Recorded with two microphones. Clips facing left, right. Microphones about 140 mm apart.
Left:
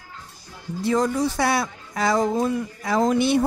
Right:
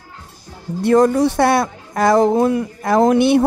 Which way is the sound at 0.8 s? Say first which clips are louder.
Right 8 dB; 60° right (ahead or behind).